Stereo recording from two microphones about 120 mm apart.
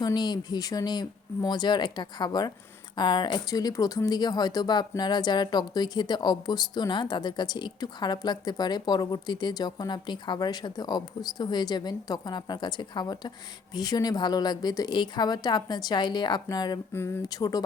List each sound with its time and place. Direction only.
0.0 s speech: 35° left (ahead or behind)
16.9 s speech: 20° left (ahead or behind)
17.2 s speech: 30° left (ahead or behind)